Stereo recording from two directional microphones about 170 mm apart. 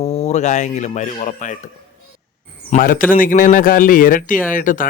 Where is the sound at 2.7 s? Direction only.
55° left (ahead or behind).